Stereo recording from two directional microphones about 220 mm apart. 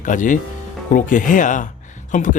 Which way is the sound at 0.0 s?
35° left (ahead or behind).